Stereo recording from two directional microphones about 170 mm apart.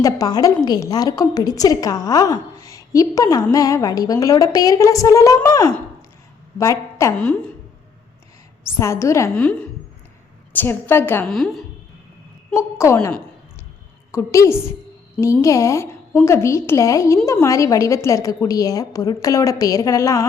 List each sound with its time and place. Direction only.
0.0 s a woman's voice: 20° left (ahead or behind)
7.2 s a woman's voice: 5° left (ahead or behind)
8.8 s a woman's voice: 15° left (ahead or behind)
9.3 s a woman's voice: 5° left (ahead or behind)
11.3 s a woman's voice: centre (ahead or behind)
12.5 s a woman's voice: 15° left (ahead or behind)